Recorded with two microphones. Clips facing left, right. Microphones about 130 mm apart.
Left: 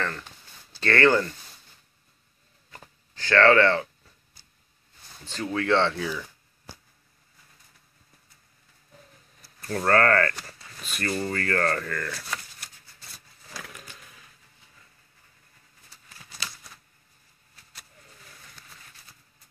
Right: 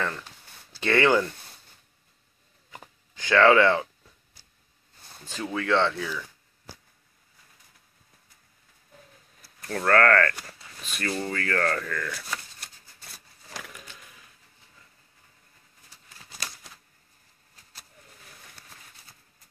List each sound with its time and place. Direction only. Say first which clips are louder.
0.7 s speech: even; 10° right (ahead or behind)
2.7 s a sound: right 2 dB; 15° right (ahead or behind)
5.3 s speech: left 1 dB; centre (ahead or behind)
9.6 s speech: even; 10° left (ahead or behind)